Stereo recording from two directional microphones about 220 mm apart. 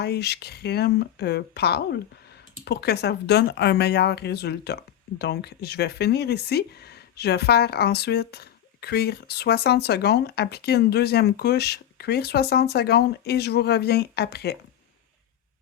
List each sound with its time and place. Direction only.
0.0 s speech: 50° left (ahead or behind)